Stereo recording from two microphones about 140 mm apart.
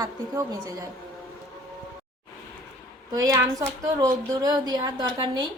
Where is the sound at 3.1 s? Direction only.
25° right (ahead or behind).